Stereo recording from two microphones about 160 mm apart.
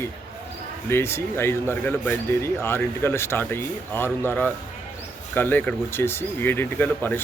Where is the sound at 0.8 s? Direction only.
15° left (ahead or behind).